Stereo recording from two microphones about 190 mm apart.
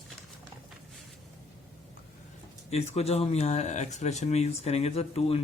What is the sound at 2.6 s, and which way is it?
Speech, 35° left (ahead or behind).